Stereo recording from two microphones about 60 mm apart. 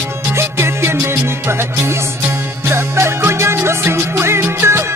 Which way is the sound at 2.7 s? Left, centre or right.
Right.